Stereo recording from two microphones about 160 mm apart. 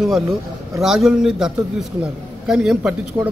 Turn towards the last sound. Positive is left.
turn(degrees=-5)  # may be behind; listen again after turning